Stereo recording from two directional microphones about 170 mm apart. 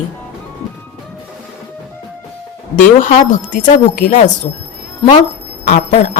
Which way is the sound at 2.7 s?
50° left (ahead or behind).